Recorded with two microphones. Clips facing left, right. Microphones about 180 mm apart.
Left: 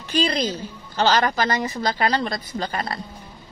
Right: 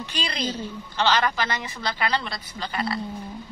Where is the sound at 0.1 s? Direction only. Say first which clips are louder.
Left 9 dB; 45° left (ahead or behind).